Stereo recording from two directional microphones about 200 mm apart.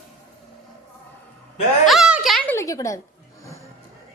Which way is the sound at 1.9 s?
5° right (ahead or behind).